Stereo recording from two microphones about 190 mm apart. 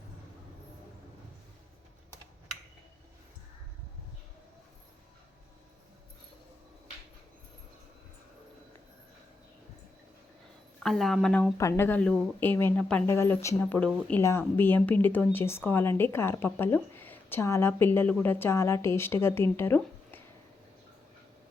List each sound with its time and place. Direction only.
10.8 s a woman's voice: centre (ahead or behind)